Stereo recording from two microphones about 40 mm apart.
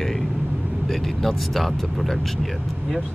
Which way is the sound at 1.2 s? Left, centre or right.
Centre.